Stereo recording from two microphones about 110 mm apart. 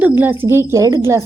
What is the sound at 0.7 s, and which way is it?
Speech, 30° right (ahead or behind).